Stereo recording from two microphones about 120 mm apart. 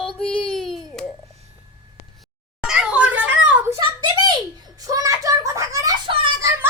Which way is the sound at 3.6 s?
30° right (ahead or behind).